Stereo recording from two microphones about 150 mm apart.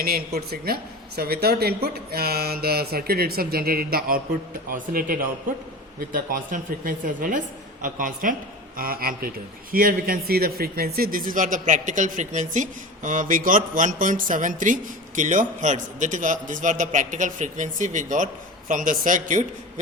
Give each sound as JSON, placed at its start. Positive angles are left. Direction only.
{"t": 0.3, "sound": "speech", "side_deg": -90}